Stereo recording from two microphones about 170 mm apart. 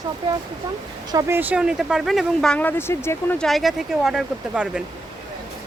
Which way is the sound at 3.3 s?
Centre (ahead or behind).